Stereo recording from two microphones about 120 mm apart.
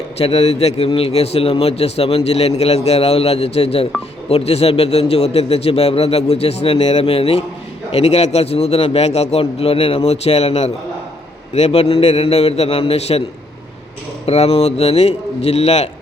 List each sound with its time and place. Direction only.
0.2 s a man's voice: 55° left (ahead or behind)
14.3 s a man's voice: 55° left (ahead or behind)